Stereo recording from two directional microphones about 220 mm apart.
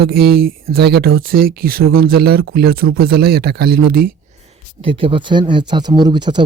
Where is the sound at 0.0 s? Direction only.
45° right (ahead or behind).